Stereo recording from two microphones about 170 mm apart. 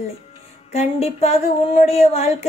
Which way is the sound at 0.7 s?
40° left (ahead or behind).